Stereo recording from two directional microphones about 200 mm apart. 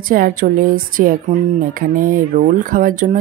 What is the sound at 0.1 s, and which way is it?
Speech, 45° right (ahead or behind).